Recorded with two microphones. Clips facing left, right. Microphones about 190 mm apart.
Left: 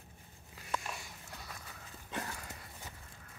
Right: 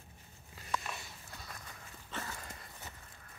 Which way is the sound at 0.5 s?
10° left (ahead or behind).